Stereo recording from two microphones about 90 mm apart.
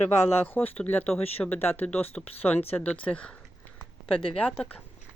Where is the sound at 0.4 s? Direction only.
20° left (ahead or behind).